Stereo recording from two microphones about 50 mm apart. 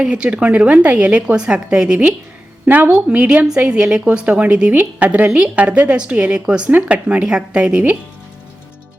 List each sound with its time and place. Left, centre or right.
0.0 s a woman's voice: centre
2.6 s a woman's voice: right
2.9 s a woman's voice: right
6.7 s a woman's voice: right